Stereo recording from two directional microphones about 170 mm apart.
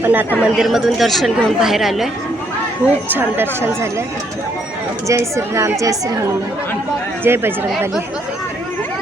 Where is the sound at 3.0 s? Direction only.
10° right (ahead or behind).